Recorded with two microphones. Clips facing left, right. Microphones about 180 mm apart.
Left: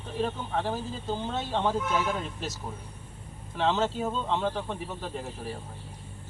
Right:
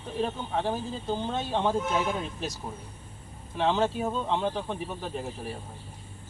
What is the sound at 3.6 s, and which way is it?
Speech, 15° right (ahead or behind).